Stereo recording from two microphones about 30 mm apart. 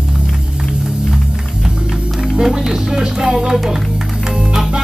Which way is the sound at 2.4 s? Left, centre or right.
Centre.